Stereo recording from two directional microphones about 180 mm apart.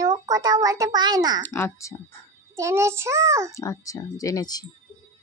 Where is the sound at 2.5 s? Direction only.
15° right (ahead or behind).